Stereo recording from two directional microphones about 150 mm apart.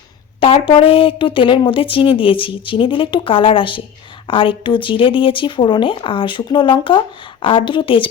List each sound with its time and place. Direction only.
0.3 s speech: 35° left (ahead or behind)